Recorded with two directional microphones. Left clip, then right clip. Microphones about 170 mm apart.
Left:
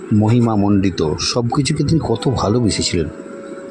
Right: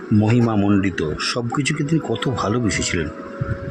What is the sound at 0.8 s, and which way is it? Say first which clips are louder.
Speech: left 4 dB; 15° left (ahead or behind).